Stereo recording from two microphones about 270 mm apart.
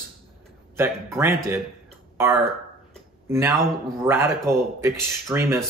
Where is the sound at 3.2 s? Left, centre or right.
Centre.